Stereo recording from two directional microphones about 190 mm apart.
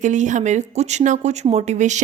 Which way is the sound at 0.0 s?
40° right (ahead or behind).